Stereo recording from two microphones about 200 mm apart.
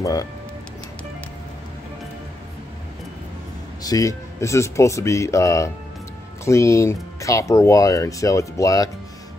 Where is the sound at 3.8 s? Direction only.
15° left (ahead or behind).